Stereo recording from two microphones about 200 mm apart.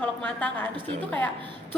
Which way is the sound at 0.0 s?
5° left (ahead or behind).